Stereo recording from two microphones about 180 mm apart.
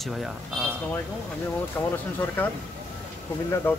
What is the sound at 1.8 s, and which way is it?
Speech, 10° left (ahead or behind).